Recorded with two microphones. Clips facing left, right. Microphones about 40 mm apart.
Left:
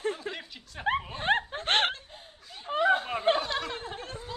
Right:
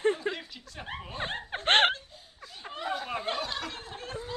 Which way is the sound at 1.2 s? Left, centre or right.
Left.